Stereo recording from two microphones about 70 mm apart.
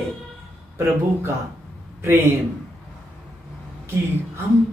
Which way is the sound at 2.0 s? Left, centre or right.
Right.